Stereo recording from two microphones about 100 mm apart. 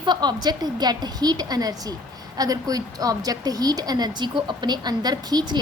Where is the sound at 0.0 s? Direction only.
45° right (ahead or behind).